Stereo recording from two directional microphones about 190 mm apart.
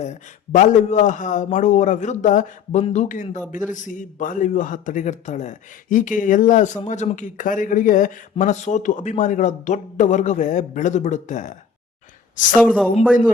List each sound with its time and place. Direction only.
0.0 s a man's voice: 40° left (ahead or behind)
12.5 s a woman's voice: 5° left (ahead or behind)